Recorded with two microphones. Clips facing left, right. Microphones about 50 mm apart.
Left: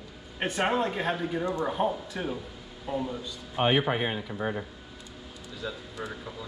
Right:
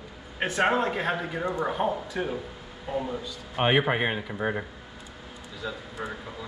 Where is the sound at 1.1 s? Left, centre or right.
Centre.